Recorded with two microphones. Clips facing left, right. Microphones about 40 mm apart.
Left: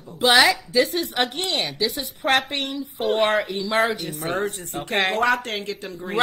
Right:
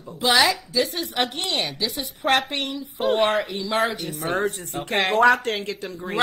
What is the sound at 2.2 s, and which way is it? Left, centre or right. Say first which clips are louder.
A woman's voice: even; left.